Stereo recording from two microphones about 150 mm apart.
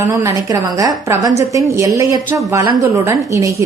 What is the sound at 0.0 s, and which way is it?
A woman's voice, 20° right (ahead or behind).